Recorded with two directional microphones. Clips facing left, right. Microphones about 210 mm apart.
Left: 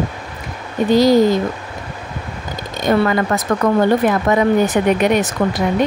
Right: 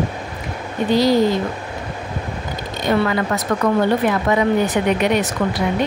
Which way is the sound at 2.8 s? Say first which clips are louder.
Left 3 dB; 45° left (ahead or behind).